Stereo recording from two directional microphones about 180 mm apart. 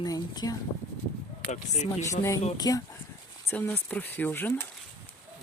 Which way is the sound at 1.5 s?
40° left (ahead or behind).